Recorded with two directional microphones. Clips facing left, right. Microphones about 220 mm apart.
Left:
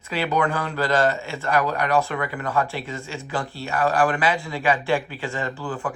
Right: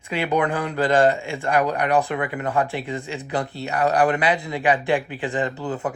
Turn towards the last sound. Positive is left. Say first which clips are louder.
# right 3 dB
turn(degrees=-20)  # may be behind; listen again after turning